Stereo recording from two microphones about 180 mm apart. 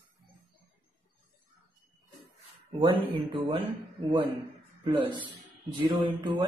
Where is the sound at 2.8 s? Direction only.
25° right (ahead or behind).